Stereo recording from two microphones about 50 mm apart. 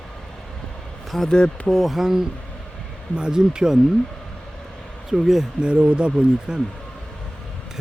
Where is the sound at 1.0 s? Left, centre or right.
Centre.